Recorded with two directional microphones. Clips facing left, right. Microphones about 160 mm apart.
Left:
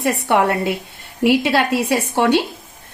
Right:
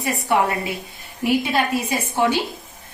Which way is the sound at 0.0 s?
70° left (ahead or behind).